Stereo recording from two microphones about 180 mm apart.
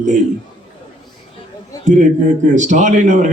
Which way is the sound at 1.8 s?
45° right (ahead or behind).